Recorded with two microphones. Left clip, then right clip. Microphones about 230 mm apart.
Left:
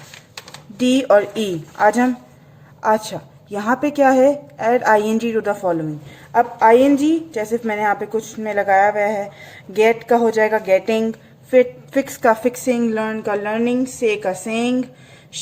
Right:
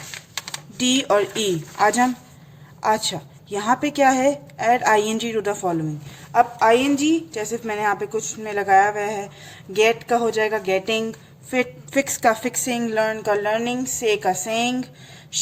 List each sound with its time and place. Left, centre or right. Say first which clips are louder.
0.8 s a woman's voice: left 5 dB; right
6.7 s a woman's voice: left 5 dB; right